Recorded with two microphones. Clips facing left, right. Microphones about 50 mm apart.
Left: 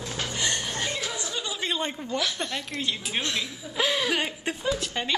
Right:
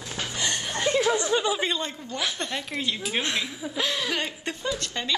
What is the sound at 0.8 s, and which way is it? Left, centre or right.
Chuckle, right.